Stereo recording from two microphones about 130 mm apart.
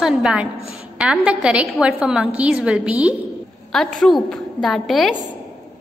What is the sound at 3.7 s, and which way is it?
A woman's voice, 5° left (ahead or behind).